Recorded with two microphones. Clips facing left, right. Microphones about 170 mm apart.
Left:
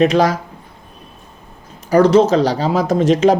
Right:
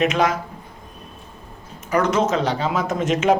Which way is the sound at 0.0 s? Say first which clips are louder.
Left 6 dB; 35° left (ahead or behind).